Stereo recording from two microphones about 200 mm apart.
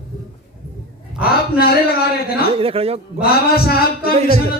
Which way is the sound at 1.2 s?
50° left (ahead or behind).